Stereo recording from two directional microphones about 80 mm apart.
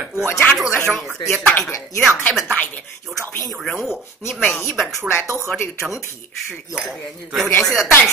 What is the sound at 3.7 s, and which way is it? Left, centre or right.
Speech, centre.